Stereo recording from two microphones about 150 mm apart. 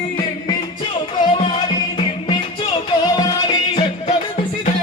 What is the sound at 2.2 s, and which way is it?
Music, 35° left (ahead or behind).